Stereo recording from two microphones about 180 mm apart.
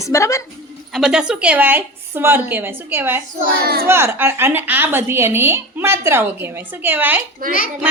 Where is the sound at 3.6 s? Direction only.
60° right (ahead or behind).